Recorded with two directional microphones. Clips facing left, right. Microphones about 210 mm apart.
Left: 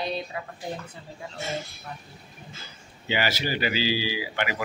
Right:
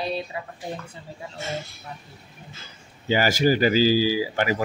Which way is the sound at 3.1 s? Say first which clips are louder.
Right 7 dB; 45° right (ahead or behind).